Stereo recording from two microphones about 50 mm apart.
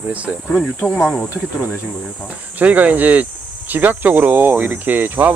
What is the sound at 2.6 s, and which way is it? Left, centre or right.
Speech, right.